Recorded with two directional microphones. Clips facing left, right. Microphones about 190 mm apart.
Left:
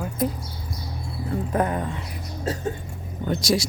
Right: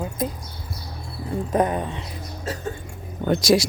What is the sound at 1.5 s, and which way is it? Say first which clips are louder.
Speech: right 3 dB; 20° right (ahead or behind).